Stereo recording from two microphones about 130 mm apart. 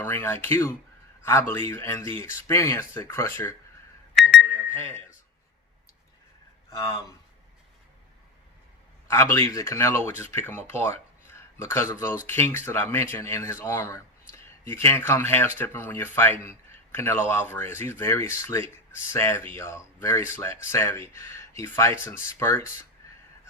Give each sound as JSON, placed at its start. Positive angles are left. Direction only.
{"t": 0.0, "sound": "speech", "side_deg": 15}
{"t": 4.5, "sound": "alarm clock", "side_deg": 20}
{"t": 6.7, "sound": "speech", "side_deg": 25}
{"t": 9.0, "sound": "speech", "side_deg": 20}